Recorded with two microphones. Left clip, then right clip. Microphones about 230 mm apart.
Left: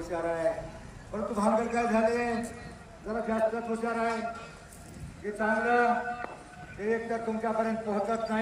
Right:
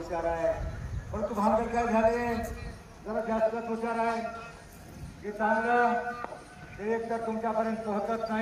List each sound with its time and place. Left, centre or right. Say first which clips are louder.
0.0 s a man's voice: even; left
5.4 s a man's voice: right 1 dB; left